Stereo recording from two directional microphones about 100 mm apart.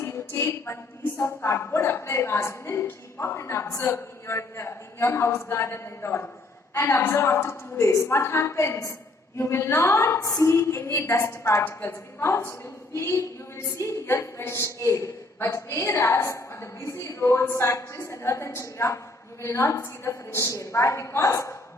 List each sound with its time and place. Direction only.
0.0 s a woman's voice: 25° left (ahead or behind)